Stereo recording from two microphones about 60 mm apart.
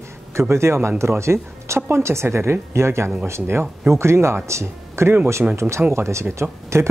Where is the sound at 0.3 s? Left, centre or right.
Right.